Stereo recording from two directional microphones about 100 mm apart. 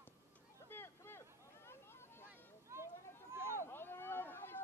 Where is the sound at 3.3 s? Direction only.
25° right (ahead or behind).